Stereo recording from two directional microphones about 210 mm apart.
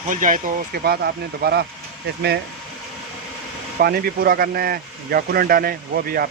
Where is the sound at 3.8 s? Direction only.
45° right (ahead or behind).